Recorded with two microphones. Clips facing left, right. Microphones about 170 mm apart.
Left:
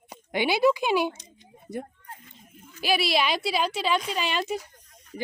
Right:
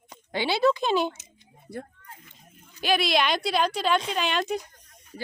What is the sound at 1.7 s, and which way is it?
Speech, 45° left (ahead or behind).